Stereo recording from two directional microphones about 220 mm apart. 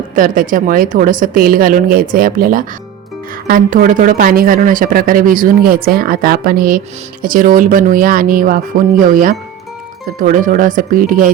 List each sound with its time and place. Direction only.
0.2 s speech: 40° right (ahead or behind)